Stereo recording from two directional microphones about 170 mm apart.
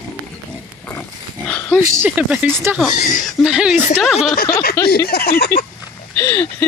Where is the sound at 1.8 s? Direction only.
15° right (ahead or behind).